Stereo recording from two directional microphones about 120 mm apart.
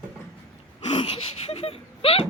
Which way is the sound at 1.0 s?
55° left (ahead or behind).